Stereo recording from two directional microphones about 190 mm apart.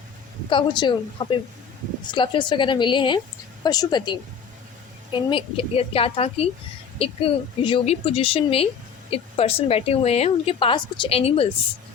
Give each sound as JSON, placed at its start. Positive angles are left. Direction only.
{"t": 0.5, "sound": "a woman's voice", "side_deg": 25}